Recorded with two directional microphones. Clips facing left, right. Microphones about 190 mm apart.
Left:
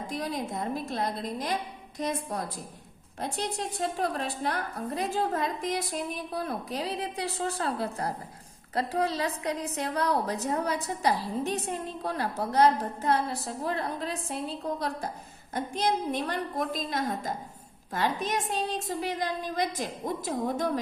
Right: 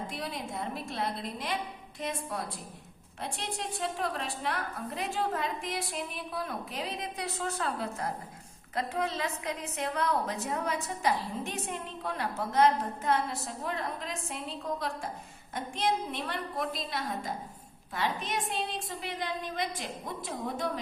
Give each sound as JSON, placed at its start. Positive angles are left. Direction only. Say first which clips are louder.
{"t": 0.1, "sound": "a woman's voice", "louder": "left 5 dB", "side_deg": 40}